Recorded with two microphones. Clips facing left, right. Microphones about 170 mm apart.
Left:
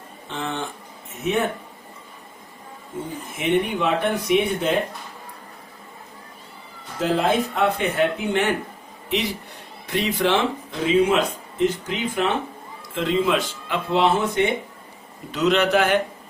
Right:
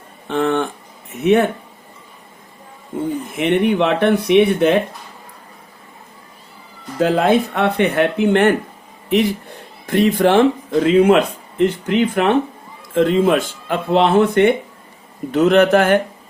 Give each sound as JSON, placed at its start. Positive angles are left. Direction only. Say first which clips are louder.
{"t": 0.3, "sound": "speech", "louder": "right 11 dB", "side_deg": -60}
{"t": 3.3, "sound": "speech", "louder": "right 5 dB", "side_deg": -65}
{"t": 7.0, "sound": "speech", "louder": "right 6 dB", "side_deg": -65}
{"t": 9.8, "sound": "a man's voice", "louder": "right 8 dB", "side_deg": -50}